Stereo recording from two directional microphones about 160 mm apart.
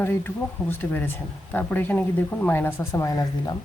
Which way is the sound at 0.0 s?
15° left (ahead or behind).